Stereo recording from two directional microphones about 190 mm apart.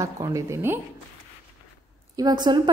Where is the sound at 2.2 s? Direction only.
20° right (ahead or behind).